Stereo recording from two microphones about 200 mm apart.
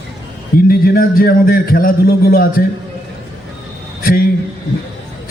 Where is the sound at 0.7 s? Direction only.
50° left (ahead or behind).